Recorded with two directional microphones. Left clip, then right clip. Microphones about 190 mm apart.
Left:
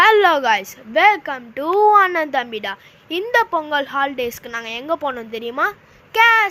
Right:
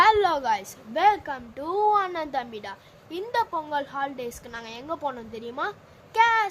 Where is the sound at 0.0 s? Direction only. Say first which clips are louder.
Left 7 dB; 20° left (ahead or behind).